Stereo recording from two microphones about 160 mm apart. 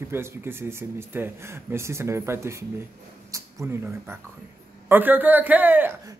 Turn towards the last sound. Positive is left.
turn(degrees=-10)  # may be behind; listen again after turning